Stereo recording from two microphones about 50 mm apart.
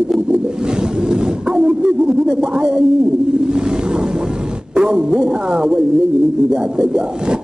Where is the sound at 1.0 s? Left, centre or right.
Centre.